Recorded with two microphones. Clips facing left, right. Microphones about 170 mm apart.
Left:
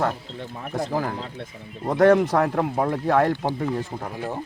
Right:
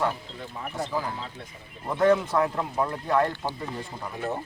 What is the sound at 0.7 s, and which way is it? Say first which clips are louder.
Speech: left 5 dB; 40° left (ahead or behind).